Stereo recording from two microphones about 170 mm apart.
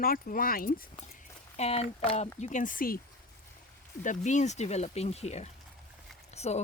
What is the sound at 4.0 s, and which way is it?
Speech, 45° left (ahead or behind).